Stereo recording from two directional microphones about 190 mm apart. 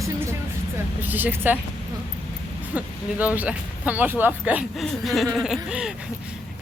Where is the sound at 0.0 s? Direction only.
15° right (ahead or behind).